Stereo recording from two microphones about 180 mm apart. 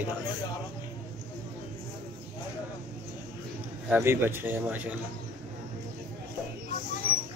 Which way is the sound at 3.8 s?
10° right (ahead or behind).